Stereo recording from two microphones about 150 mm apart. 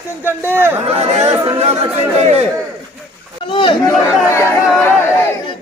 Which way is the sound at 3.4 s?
35° left (ahead or behind).